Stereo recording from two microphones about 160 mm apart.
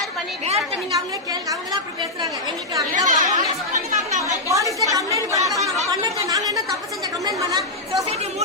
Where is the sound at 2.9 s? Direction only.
50° right (ahead or behind).